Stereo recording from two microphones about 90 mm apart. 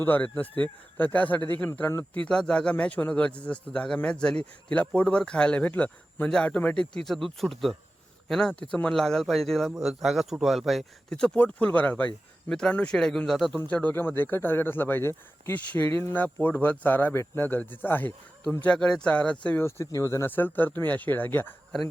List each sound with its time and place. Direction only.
0.0 s speech: 20° left (ahead or behind)
2.1 s a man's voice: 10° left (ahead or behind)
11.1 s a man's voice: 10° left (ahead or behind)
13.6 s speech: 15° left (ahead or behind)
19.6 s speech: 30° left (ahead or behind)